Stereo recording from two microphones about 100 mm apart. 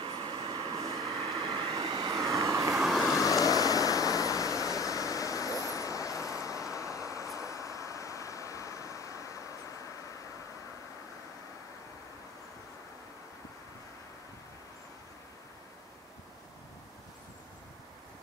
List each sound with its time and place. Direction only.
0.0 s vehicle: 60° right (ahead or behind); by 1.0 s 80° right
1.2 s vehicle: 65° right (ahead or behind); by 2.1 s 50° right (ahead or behind)
2.1 s vehicle: 35° right (ahead or behind)
2.7 s vehicle: centre (ahead or behind)
3.2 s waves: 35° left (ahead or behind)
6.8 s vehicle: 30° left (ahead or behind)